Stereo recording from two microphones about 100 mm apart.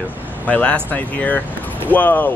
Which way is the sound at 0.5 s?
15° left (ahead or behind).